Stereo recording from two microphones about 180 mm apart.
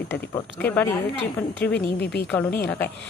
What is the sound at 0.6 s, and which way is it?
Speech, 10° left (ahead or behind).